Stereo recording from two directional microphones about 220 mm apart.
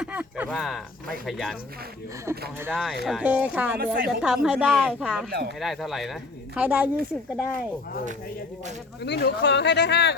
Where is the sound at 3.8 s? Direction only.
45° right (ahead or behind).